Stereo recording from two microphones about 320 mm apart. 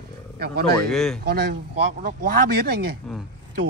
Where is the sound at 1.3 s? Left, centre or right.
Right.